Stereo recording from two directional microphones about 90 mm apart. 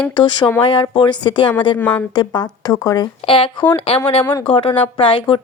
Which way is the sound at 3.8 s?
90° left.